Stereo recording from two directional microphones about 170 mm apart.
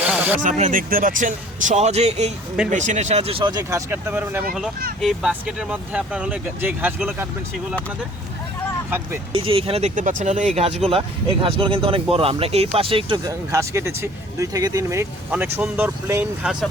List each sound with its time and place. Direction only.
0.0 s a sound: 5° right (ahead or behind)
0.3 s a man's voice: 45° right (ahead or behind); by 3.6 s 30° right (ahead or behind)
3.6 s speech: 15° right (ahead or behind)
9.3 s speech: 30° right (ahead or behind)
9.9 s a man's voice: 50° right (ahead or behind); by 13.1 s 30° right (ahead or behind)
13.2 s speech: 15° right (ahead or behind)